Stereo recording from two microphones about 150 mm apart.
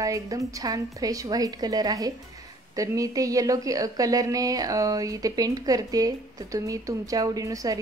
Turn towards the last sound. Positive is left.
turn(degrees=-25)  # may be behind; listen again after turning